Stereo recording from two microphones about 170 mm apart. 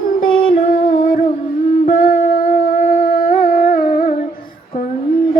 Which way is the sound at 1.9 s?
55° left (ahead or behind).